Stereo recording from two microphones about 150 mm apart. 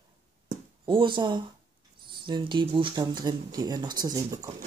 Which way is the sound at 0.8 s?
30° right (ahead or behind).